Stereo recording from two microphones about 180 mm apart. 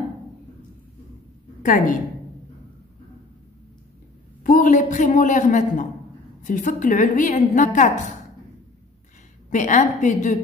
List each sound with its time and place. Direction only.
1.6 s a woman's voice: 45° left (ahead or behind)
4.4 s a man's voice: 50° left (ahead or behind)
9.5 s a woman's voice: 45° left (ahead or behind)